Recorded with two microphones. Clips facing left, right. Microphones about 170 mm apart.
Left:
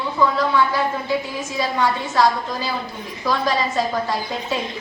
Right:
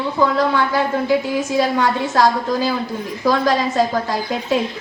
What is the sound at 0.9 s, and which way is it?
A woman's voice, 60° right (ahead or behind).